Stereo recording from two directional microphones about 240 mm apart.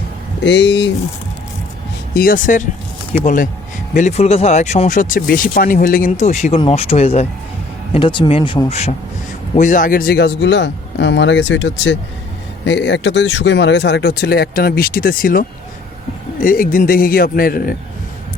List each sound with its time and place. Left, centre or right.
0.4 s speech: left
2.1 s a man's voice: left